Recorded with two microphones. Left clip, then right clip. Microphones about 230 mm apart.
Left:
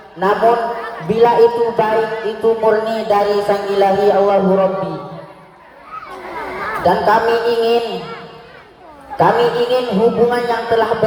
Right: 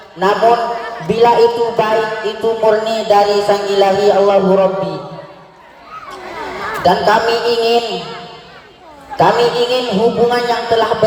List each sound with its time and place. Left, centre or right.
0.2 s a man's voice: right
6.8 s a man's voice: right